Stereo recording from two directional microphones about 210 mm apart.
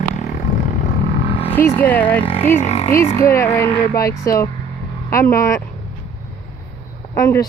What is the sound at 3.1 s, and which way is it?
A woman's voice, 10° left (ahead or behind).